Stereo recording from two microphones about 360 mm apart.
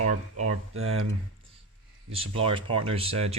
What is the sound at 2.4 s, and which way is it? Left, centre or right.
Speech, centre.